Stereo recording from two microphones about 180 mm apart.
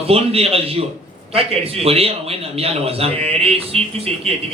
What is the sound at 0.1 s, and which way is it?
A man's voice, 35° right (ahead or behind).